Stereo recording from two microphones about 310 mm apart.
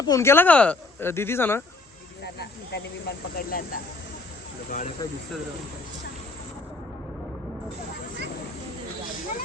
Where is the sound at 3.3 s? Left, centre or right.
Left.